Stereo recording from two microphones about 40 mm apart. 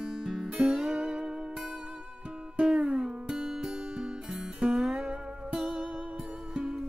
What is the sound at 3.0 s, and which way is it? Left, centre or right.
Music, centre.